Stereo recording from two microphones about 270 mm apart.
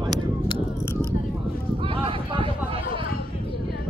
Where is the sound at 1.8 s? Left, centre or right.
Centre.